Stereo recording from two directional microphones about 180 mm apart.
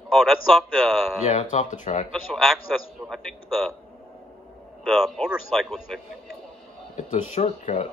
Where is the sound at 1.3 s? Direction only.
40° left (ahead or behind).